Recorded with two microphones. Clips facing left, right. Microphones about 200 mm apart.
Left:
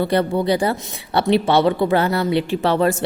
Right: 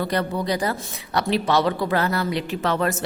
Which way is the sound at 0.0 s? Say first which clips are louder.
Left 6 dB; 25° left (ahead or behind).